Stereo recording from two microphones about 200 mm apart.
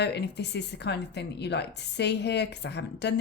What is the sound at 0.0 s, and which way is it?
A woman's voice, 60° left (ahead or behind).